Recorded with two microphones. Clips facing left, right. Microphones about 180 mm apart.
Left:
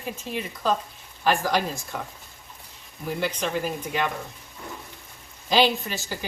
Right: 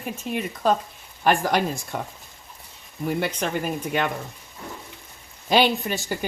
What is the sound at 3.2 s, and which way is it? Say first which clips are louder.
Speech: left 1 dB; 60° right (ahead or behind).